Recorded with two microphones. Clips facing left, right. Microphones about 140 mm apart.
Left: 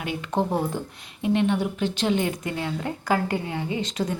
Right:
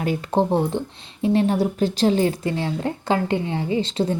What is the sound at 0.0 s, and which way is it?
Speech, 40° right (ahead or behind).